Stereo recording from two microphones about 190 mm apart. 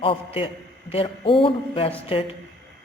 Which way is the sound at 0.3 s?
30° left (ahead or behind).